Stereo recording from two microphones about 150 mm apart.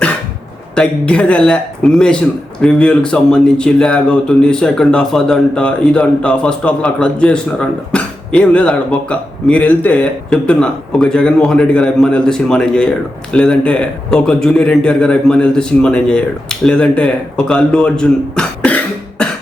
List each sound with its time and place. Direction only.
0.8 s a man's voice: 10° left (ahead or behind)